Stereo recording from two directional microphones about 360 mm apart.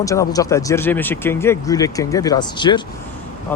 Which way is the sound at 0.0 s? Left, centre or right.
Centre.